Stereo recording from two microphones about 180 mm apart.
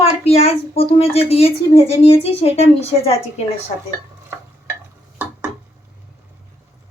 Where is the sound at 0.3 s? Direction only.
35° left (ahead or behind).